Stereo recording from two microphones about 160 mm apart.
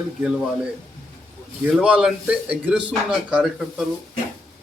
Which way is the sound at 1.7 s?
5° right (ahead or behind).